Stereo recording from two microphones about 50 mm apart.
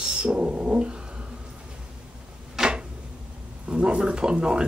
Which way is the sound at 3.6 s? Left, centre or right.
Right.